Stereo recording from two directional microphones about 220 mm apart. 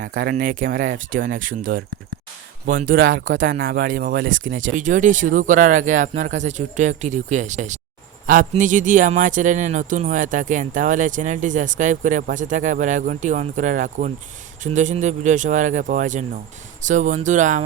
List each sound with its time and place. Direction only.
0.2 s speech: 45° right (ahead or behind)
2.9 s speech: 40° right (ahead or behind)
4.3 s speech: 60° right (ahead or behind)
4.7 s speech: 35° right (ahead or behind)